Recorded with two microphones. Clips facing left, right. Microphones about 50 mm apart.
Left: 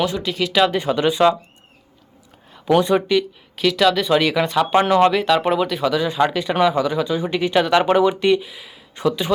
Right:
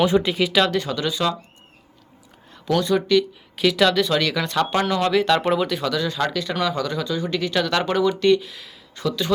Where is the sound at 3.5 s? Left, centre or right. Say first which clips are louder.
Left 1 dB; centre.